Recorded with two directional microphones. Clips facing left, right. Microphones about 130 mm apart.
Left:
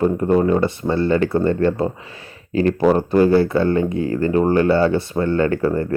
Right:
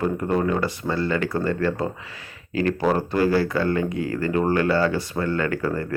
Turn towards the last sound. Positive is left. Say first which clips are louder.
# left 6 dB
turn(degrees=25)  # may be behind; listen again after turning